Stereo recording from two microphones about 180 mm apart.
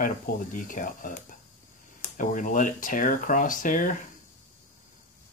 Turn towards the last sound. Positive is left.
turn(degrees=45)  # may be behind; listen again after turning